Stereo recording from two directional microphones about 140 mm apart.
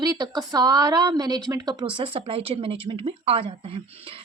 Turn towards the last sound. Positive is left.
turn(degrees=-40)  # may be behind; listen again after turning